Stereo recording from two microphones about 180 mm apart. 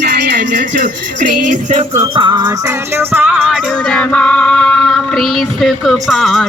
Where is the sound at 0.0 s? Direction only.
65° right (ahead or behind).